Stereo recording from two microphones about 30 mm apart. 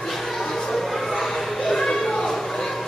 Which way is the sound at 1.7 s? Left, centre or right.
Centre.